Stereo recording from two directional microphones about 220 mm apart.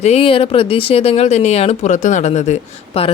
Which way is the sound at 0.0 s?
25° left (ahead or behind).